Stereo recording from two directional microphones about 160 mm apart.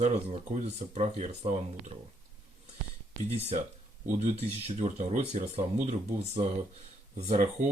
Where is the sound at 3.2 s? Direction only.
40° right (ahead or behind).